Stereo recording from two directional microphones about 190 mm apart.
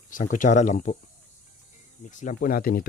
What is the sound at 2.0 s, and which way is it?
Speech, 40° left (ahead or behind).